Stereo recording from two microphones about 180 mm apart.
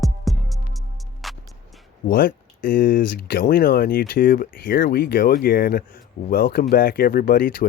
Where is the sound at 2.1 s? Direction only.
55° left (ahead or behind).